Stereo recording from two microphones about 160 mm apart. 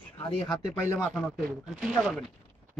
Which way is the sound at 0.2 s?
20° left (ahead or behind).